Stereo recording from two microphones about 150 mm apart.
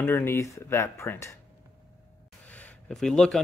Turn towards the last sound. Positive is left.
turn(degrees=5)  # may be behind; listen again after turning